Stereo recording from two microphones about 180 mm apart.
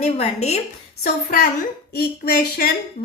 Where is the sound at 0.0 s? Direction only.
35° left (ahead or behind).